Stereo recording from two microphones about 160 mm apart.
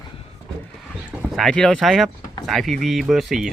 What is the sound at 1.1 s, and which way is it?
Speech, centre (ahead or behind).